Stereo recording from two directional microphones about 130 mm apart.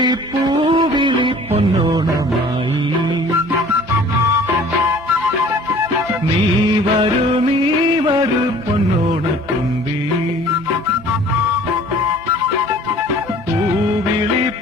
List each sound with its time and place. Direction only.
0.0 s music: 35° right (ahead or behind)